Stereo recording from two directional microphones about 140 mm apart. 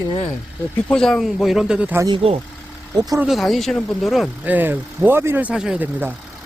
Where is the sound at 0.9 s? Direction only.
5° left (ahead or behind).